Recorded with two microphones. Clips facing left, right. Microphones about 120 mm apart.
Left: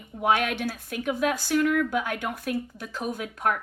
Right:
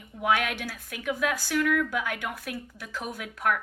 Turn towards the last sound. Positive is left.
turn(degrees=30)  # may be behind; listen again after turning